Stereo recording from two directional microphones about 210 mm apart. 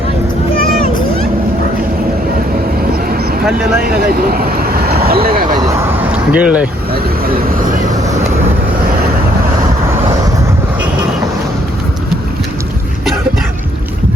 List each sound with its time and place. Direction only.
3.8 s speech: 45° right (ahead or behind)
6.1 s speech: 5° right (ahead or behind)
7.5 s vehicle: 40° right (ahead or behind)